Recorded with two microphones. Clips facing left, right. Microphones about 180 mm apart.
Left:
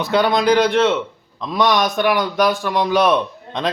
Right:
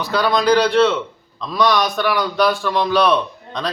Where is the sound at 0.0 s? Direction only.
20° left (ahead or behind).